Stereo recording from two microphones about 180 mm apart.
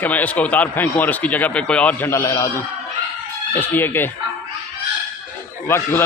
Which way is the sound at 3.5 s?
10° left (ahead or behind).